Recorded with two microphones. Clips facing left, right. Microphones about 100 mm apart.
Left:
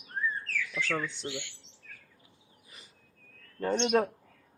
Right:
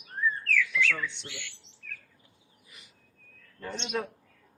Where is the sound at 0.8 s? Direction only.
40° left (ahead or behind).